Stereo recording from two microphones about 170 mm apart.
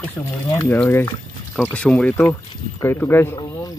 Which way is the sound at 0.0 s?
15° left (ahead or behind).